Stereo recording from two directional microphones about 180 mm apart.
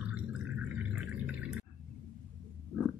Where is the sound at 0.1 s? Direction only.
10° right (ahead or behind).